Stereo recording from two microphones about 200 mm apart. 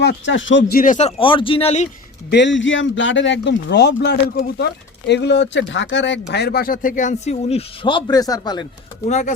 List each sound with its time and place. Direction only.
0.0 s speech: 60° left (ahead or behind)
0.7 s speech: 45° left (ahead or behind)
2.3 s speech: 65° left (ahead or behind)
6.3 s speech: 55° left (ahead or behind); by 8.6 s 20° left (ahead or behind)
9.0 s speech: 35° left (ahead or behind)